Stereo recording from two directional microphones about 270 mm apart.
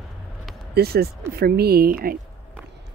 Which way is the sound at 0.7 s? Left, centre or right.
Right.